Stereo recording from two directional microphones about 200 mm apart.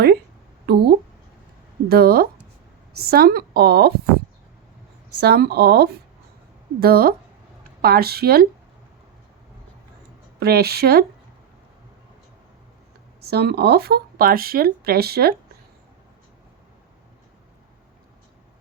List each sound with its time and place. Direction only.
0.7 s speech: 50° right (ahead or behind)
1.9 s speech: 50° right (ahead or behind)
5.2 s speech: 55° right (ahead or behind)
10.4 s speech: 50° right (ahead or behind)
13.2 s speech: 55° right (ahead or behind)